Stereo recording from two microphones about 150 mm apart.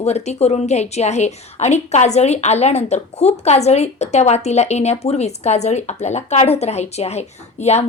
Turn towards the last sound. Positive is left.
turn(degrees=45)  # may be behind; listen again after turning